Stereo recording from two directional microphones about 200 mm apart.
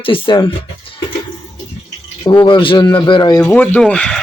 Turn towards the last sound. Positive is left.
turn(degrees=5)  # may be behind; listen again after turning